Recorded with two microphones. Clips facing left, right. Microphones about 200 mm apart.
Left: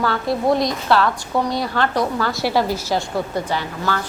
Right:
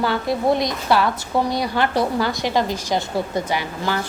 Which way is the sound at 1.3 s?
25° right (ahead or behind).